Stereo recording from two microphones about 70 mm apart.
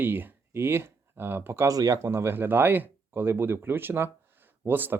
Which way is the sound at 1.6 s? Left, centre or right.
Right.